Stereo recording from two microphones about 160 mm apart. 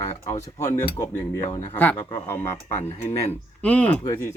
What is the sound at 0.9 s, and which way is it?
Speech, 15° left (ahead or behind).